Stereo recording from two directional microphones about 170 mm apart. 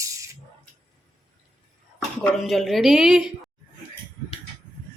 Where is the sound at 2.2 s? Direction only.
Centre (ahead or behind).